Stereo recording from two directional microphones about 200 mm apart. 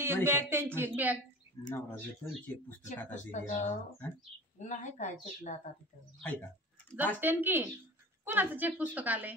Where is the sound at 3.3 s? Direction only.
35° left (ahead or behind).